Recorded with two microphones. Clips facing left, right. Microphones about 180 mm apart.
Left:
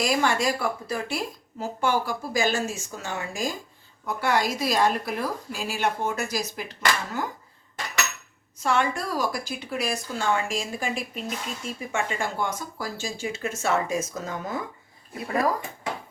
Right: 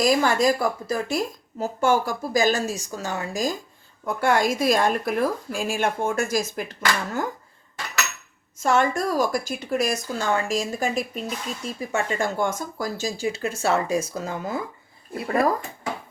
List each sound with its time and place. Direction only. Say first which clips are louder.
0.0 s speech: right 4 dB; 40° right (ahead or behind)
8.5 s speech: right 4 dB; 45° right (ahead or behind)